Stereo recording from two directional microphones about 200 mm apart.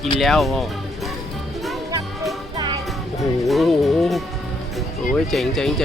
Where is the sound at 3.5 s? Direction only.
Centre (ahead or behind).